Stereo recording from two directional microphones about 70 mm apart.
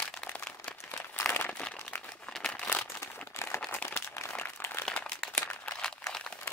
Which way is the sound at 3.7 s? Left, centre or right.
Left.